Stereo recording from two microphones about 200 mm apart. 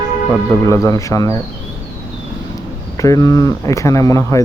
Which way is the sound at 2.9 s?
15° left (ahead or behind).